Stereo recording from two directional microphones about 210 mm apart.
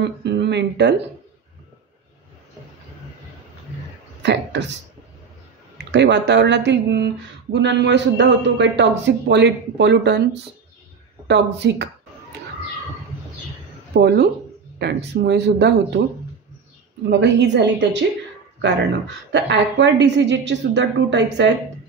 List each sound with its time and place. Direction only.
0.0 s speech: 55° right (ahead or behind)
4.2 s a man's voice: 55° right (ahead or behind)
5.9 s a man's voice: 55° right (ahead or behind)
13.9 s speech: 50° right (ahead or behind)
17.2 s a man's voice: 55° right (ahead or behind)
19.3 s a man's voice: 55° right (ahead or behind)